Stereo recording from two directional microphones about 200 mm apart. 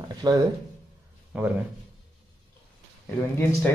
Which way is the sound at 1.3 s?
5° right (ahead or behind).